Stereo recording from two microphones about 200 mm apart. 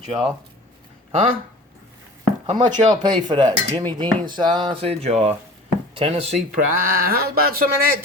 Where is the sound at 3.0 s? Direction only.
20° right (ahead or behind).